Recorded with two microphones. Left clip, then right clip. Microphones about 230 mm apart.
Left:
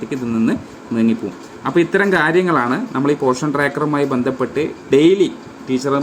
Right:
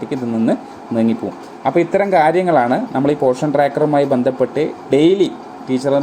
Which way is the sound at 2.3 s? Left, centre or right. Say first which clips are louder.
Right 2 dB; centre.